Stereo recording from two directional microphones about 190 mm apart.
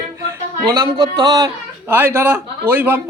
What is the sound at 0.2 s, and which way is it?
A man's voice, 20° right (ahead or behind).